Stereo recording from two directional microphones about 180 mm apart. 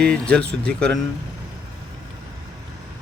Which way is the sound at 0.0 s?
5° left (ahead or behind).